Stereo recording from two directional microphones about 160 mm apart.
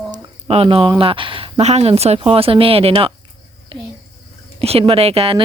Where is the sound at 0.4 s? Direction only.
35° right (ahead or behind).